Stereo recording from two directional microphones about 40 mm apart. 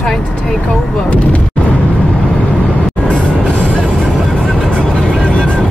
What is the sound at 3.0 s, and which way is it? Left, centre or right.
Train, left.